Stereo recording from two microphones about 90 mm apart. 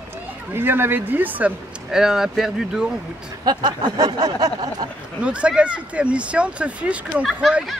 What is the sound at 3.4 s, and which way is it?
Speech, 50° right (ahead or behind).